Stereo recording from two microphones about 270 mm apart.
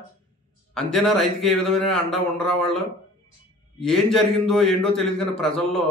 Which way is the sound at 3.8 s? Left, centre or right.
Centre.